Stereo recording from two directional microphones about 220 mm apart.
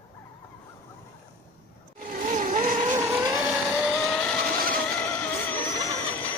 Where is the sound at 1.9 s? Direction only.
35° right (ahead or behind).